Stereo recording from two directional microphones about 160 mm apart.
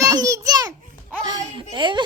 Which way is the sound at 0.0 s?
20° right (ahead or behind).